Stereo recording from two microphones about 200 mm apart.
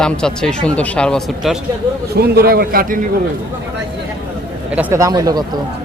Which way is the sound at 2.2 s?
50° right (ahead or behind).